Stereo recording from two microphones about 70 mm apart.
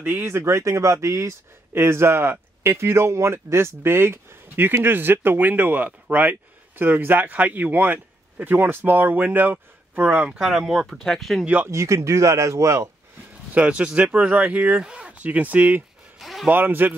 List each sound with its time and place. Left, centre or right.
0.0 s speech: right
10.9 s speech: centre
11.6 s speech: right
13.6 s speech: centre
16.2 s a sound: centre
16.4 s speech: right